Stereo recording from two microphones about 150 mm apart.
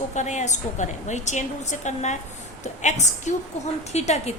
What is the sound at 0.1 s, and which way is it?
A woman's voice, 55° left (ahead or behind).